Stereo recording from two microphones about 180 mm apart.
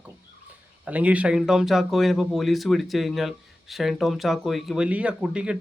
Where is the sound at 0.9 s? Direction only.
10° right (ahead or behind).